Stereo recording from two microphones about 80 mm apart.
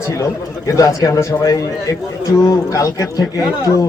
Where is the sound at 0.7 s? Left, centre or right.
Left.